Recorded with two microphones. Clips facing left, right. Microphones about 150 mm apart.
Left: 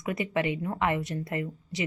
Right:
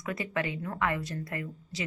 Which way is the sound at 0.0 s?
20° left (ahead or behind).